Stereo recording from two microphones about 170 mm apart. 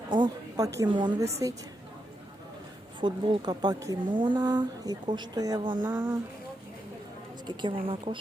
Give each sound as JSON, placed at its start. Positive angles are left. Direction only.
{"t": 0.1, "sound": "a woman's voice", "side_deg": -25}
{"t": 3.0, "sound": "a woman's voice", "side_deg": -25}
{"t": 7.4, "sound": "a woman's voice", "side_deg": -30}